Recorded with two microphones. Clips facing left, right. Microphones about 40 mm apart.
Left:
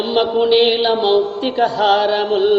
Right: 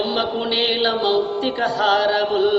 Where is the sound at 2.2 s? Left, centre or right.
Left.